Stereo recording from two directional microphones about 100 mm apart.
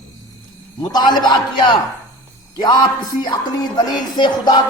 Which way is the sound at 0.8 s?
50° left (ahead or behind).